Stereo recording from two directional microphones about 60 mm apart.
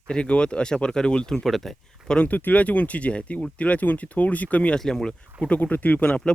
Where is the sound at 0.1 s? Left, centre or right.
Centre.